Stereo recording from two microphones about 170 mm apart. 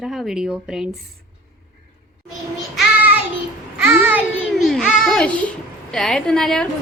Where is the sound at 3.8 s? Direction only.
10° right (ahead or behind).